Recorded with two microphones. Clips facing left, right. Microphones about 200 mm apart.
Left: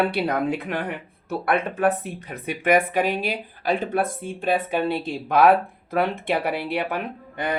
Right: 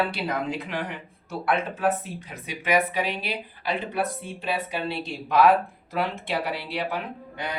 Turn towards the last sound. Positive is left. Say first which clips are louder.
# left 5 dB
turn(degrees=55)  # may be behind; listen again after turning